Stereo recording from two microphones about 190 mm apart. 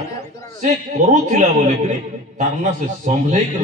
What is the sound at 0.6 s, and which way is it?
A man's voice, 40° right (ahead or behind).